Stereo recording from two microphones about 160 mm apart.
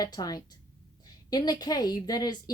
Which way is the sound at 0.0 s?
25° left (ahead or behind).